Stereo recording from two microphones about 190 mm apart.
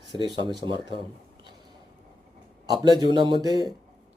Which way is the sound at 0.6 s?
25° right (ahead or behind).